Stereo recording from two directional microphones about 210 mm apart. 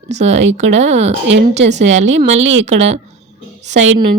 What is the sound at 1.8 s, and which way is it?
Speech, 65° right (ahead or behind).